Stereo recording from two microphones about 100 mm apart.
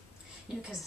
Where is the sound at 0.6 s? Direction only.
Centre (ahead or behind).